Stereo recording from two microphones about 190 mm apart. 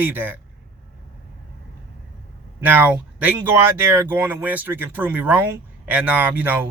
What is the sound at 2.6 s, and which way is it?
Speech, 10° right (ahead or behind).